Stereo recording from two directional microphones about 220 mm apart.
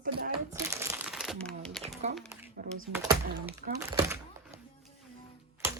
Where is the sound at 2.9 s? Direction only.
15° right (ahead or behind).